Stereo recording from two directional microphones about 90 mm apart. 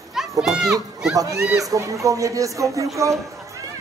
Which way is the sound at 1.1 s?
40° right (ahead or behind).